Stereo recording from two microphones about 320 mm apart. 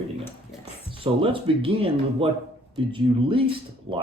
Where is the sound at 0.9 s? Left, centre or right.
Centre.